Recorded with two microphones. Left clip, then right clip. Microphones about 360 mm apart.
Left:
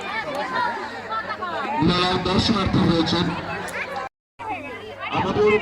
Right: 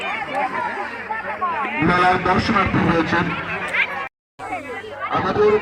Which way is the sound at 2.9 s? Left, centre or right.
Right.